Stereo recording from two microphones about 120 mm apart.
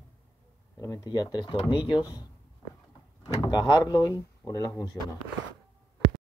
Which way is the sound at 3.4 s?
35° left (ahead or behind).